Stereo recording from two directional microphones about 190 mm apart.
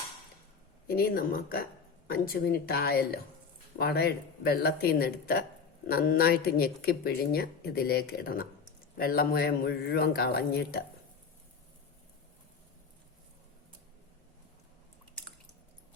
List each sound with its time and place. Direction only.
0.9 s speech: 55° left (ahead or behind)